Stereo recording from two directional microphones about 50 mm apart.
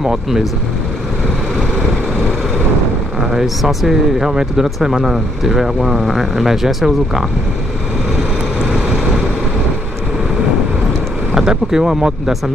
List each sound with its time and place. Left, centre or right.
0.0 s speech: centre
3.4 s speech: centre
8.5 s vehicle: centre
10.9 s speech: centre